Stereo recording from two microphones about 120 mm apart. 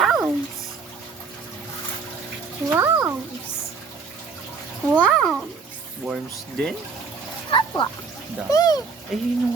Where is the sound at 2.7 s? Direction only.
15° right (ahead or behind).